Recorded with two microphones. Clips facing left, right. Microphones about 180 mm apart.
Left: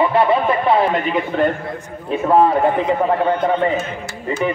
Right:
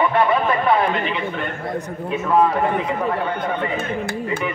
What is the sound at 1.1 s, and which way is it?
A man's voice, 40° left (ahead or behind).